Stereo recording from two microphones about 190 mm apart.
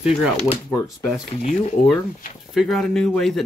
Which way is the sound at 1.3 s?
35° left (ahead or behind).